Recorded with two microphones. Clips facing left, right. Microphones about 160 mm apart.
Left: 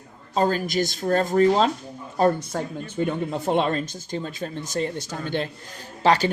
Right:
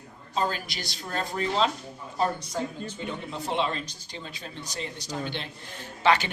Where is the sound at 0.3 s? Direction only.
45° left (ahead or behind).